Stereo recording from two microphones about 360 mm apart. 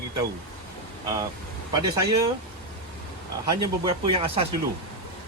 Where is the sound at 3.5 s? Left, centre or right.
Centre.